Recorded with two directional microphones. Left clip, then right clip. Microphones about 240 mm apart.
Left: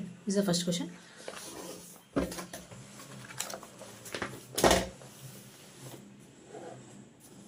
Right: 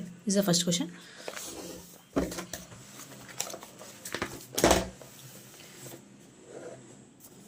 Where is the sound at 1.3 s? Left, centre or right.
Right.